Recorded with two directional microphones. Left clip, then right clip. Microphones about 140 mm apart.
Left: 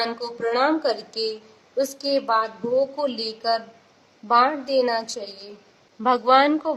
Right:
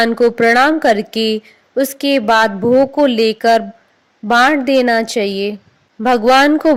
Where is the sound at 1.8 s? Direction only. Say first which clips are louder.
Right 8 dB; 40° right (ahead or behind).